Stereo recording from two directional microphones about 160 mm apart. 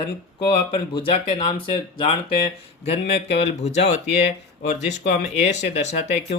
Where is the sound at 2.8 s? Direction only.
40° left (ahead or behind).